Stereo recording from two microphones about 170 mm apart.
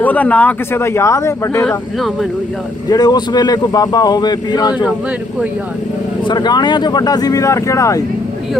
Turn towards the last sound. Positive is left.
turn(degrees=20)  # may be behind; listen again after turning